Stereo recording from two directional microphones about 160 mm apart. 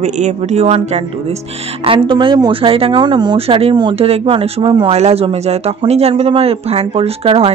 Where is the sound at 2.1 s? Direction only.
30° right (ahead or behind).